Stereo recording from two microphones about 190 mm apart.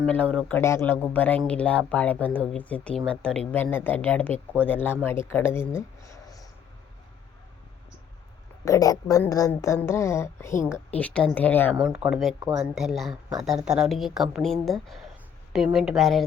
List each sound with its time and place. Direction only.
0.0 s a woman's voice: 5° left (ahead or behind)
5.7 s a sound: 15° left (ahead or behind)
8.6 s a woman's voice: 15° left (ahead or behind)
11.8 s a woman's voice: 5° right (ahead or behind)